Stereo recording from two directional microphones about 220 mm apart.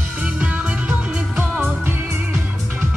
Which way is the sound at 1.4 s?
10° right (ahead or behind).